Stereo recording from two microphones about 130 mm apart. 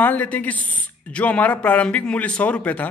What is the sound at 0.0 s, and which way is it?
A man's voice, 10° left (ahead or behind).